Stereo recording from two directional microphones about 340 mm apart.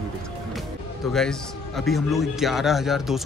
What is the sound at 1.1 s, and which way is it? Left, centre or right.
Speech, centre.